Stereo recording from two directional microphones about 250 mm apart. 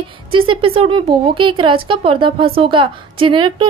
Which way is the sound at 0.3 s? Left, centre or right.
Right.